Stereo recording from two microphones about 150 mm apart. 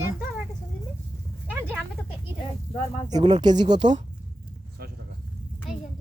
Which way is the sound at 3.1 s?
25° right (ahead or behind).